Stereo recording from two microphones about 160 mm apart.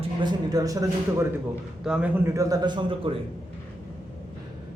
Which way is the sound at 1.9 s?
5° right (ahead or behind).